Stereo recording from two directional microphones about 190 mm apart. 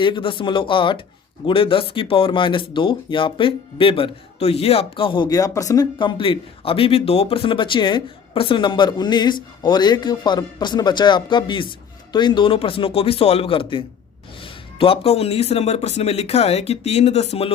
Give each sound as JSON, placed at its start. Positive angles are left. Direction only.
{"t": 0.0, "sound": "speech", "side_deg": 25}